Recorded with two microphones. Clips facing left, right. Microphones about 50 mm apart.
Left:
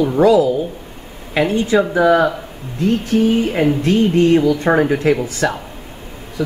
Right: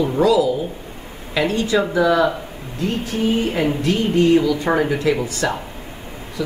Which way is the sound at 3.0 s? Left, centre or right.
Left.